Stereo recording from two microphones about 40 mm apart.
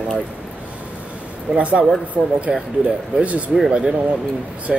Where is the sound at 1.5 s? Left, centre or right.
Right.